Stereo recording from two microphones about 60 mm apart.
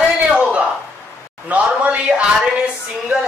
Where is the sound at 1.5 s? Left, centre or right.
Right.